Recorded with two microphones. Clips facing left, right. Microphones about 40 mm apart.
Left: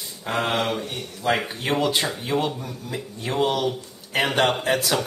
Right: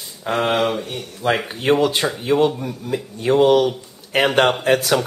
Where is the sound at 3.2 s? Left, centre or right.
Right.